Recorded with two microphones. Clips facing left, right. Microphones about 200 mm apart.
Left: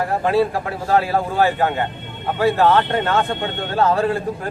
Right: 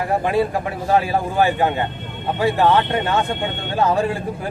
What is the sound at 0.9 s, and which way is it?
A man's voice, 15° right (ahead or behind).